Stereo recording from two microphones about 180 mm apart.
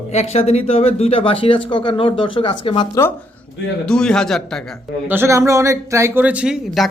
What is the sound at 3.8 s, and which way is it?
Speech, 5° left (ahead or behind).